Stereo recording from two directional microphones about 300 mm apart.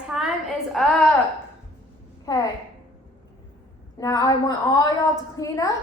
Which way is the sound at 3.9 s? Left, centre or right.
Centre.